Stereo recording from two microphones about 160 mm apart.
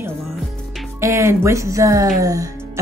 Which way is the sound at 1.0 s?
15° right (ahead or behind).